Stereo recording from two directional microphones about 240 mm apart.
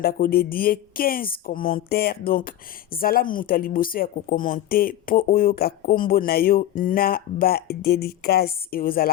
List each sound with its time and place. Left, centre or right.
0.0 s speech: left